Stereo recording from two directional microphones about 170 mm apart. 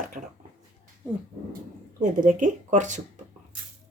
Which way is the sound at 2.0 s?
50° right (ahead or behind).